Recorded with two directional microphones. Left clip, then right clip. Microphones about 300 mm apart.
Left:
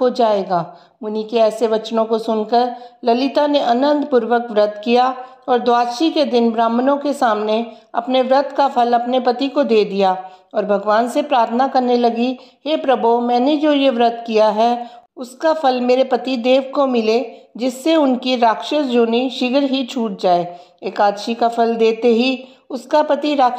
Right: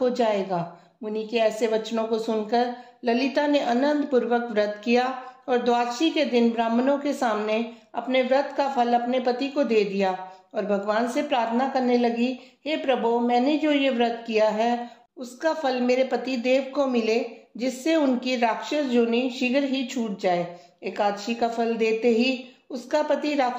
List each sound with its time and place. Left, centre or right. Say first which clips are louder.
0.0 s a woman's voice: left 8 dB; centre